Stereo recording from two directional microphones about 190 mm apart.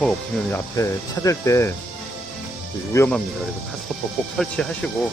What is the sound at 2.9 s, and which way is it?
Speech, 15° left (ahead or behind).